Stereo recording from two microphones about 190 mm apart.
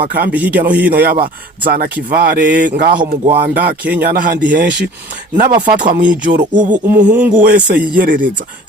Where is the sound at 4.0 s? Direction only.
60° right (ahead or behind).